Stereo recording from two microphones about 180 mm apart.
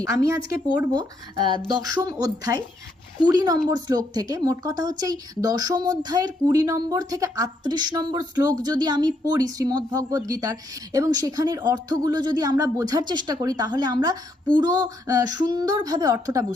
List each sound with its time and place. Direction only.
0.0 s speech: 15° right (ahead or behind)